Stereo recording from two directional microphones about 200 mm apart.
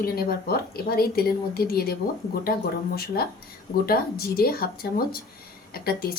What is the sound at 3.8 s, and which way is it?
A woman's voice, 50° left (ahead or behind).